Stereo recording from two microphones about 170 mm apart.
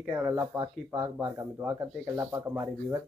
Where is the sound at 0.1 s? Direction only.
10° right (ahead or behind).